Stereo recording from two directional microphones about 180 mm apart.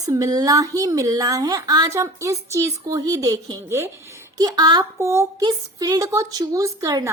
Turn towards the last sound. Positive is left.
turn(degrees=-20)  # may be behind; listen again after turning